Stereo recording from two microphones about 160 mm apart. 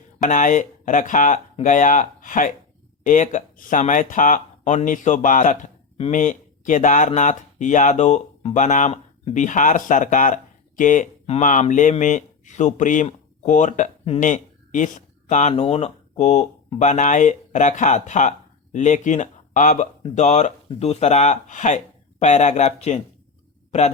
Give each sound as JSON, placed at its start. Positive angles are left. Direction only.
{"t": 0.2, "sound": "speech", "side_deg": 55}